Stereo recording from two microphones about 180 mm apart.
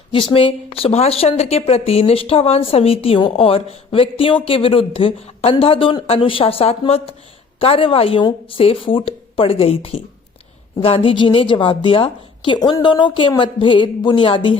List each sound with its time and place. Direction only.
0.1 s a woman's voice: 30° left (ahead or behind)